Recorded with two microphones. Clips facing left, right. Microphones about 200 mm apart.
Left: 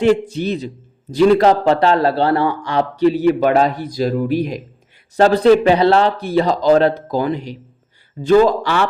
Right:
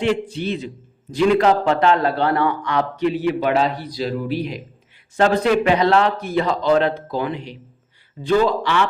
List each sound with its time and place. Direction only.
0.0 s a man's voice: 45° left (ahead or behind)